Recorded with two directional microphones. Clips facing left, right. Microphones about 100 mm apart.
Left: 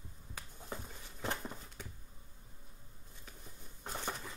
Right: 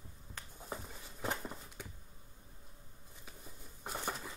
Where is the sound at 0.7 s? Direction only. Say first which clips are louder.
Even; 5° right (ahead or behind).